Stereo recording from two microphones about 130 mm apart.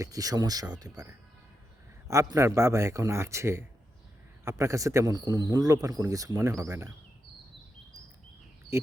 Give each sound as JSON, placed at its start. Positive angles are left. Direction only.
{"t": 0.0, "sound": "speech", "side_deg": -25}
{"t": 8.7, "sound": "speech", "side_deg": -20}